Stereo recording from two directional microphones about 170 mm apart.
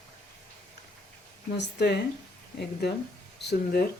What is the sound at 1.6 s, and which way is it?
Speech, 80° left.